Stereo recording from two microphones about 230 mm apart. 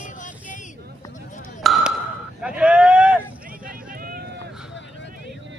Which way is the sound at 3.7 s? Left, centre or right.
Right.